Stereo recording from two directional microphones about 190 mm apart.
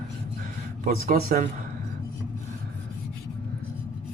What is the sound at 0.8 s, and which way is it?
Speech, 45° right (ahead or behind).